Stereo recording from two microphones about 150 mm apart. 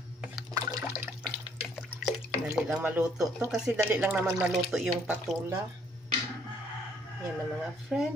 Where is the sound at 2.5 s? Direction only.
10° right (ahead or behind).